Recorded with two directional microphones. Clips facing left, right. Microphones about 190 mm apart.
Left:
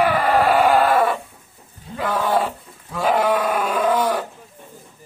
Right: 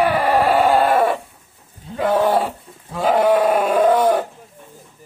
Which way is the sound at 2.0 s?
30° right (ahead or behind).